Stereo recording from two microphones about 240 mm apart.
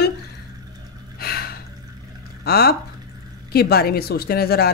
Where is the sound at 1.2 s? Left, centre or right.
Left.